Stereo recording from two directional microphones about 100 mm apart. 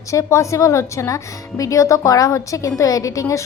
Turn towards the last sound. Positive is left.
turn(degrees=35)  # may be behind; listen again after turning